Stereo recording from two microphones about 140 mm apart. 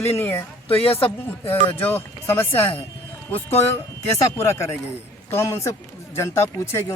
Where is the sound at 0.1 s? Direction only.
15° left (ahead or behind).